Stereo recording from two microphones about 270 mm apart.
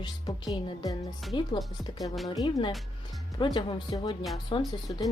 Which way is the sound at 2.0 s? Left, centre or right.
Centre.